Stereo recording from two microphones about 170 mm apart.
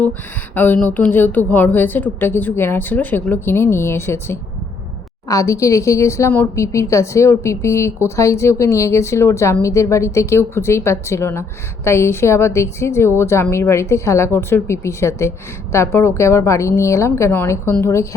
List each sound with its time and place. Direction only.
0.5 s a woman's voice: 10° left (ahead or behind)